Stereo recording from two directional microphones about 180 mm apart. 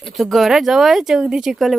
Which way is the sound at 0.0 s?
Centre (ahead or behind).